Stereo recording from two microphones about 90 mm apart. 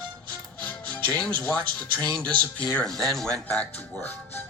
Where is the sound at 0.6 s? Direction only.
15° left (ahead or behind).